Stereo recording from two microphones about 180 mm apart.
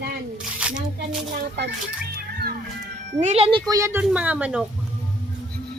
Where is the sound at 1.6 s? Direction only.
75° right (ahead or behind).